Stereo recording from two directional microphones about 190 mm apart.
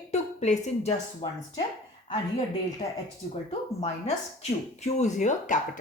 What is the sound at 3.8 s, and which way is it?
Speech, 35° left (ahead or behind).